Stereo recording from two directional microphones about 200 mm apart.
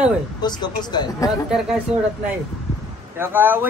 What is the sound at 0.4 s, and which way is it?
Speech, 20° left (ahead or behind).